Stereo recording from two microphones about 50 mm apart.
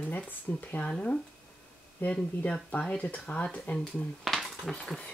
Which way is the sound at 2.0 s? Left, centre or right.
Left.